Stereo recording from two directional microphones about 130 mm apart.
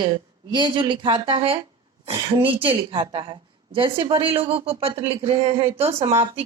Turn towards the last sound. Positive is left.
turn(degrees=-50)  # may be behind; listen again after turning